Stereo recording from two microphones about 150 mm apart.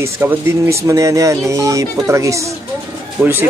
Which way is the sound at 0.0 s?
15° right (ahead or behind).